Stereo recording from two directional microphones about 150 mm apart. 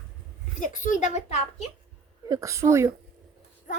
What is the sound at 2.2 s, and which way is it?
Speech, 20° right (ahead or behind).